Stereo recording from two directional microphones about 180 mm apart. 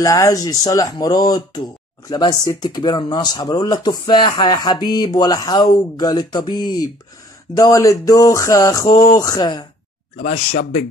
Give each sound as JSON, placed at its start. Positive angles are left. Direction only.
{"t": 0.0, "sound": "speech", "side_deg": 20}